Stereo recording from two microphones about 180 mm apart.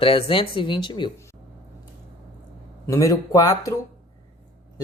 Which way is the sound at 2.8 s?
20° left (ahead or behind).